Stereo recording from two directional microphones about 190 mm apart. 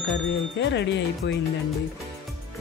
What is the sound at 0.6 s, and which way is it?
Speech, 65° left (ahead or behind).